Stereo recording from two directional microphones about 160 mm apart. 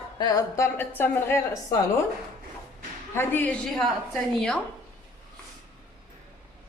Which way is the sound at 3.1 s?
15° left (ahead or behind).